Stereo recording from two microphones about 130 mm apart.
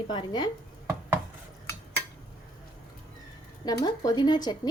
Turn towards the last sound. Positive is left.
turn(degrees=30)  # may be behind; listen again after turning